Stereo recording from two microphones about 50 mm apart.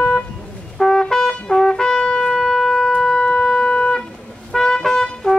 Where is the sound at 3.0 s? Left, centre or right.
Centre.